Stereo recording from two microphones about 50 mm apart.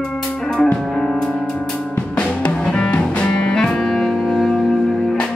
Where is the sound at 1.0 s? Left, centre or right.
Centre.